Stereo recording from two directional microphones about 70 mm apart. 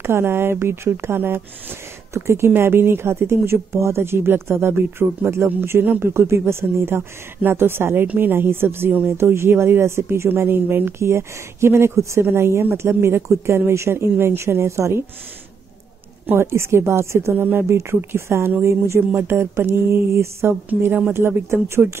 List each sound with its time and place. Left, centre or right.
0.0 s speech: right
16.3 s speech: right